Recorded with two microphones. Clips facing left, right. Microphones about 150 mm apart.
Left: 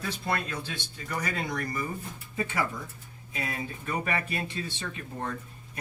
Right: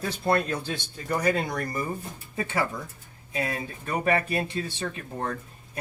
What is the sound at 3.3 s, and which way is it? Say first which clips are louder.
Speech: right 4 dB; 35° right (ahead or behind).